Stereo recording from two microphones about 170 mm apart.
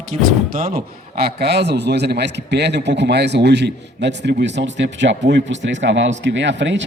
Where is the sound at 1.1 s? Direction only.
70° right (ahead or behind).